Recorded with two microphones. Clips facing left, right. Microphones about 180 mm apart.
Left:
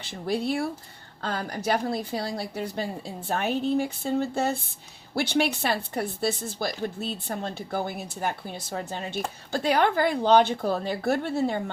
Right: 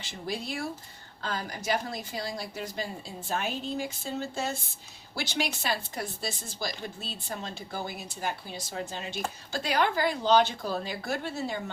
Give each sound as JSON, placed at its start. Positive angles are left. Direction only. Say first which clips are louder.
{"t": 0.0, "sound": "speech", "louder": "left 7 dB", "side_deg": 60}
{"t": 2.1, "sound": "speech", "louder": "left 5 dB", "side_deg": 30}
{"t": 2.4, "sound": "speech", "louder": "left 5 dB", "side_deg": 60}